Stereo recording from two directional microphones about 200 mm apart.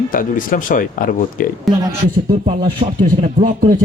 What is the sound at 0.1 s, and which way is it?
Speech, 45° left (ahead or behind).